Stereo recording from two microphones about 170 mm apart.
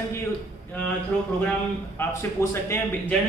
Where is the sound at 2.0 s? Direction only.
15° left (ahead or behind).